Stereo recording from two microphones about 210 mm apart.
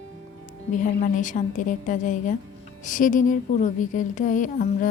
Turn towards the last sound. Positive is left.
turn(degrees=40)  # may be behind; listen again after turning